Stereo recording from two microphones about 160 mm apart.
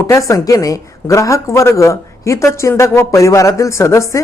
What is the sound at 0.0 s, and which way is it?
A woman's voice, 20° left (ahead or behind).